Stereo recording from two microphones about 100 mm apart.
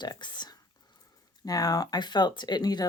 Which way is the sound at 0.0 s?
50° left (ahead or behind).